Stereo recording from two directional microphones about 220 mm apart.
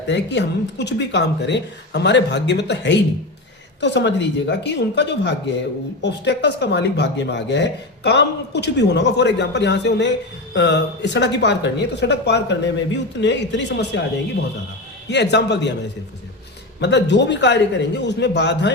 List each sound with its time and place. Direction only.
0.1 s speech: 50° left (ahead or behind)
15.1 s speech: 50° left (ahead or behind)
16.8 s speech: 50° left (ahead or behind)